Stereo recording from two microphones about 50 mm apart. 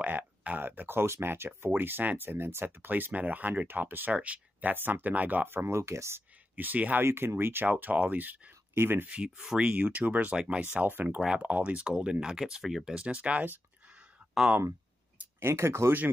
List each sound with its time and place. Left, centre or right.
0.0 s a sound: right
0.7 s speech: right
3.1 s speech: right
5.5 s speech: right
5.8 s speech: right
6.5 s speech: right
7.0 s speech: right
7.7 s speech: right
8.7 s speech: right
9.0 s speech: right
10.3 s speech: right
10.9 s speech: right
11.1 s speech: right
15.4 s speech: right